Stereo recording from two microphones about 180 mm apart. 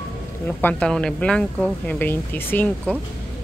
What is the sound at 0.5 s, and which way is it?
Speech, 10° left (ahead or behind).